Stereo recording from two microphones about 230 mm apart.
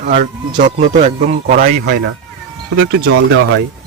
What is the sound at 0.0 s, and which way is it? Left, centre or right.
Speech, right.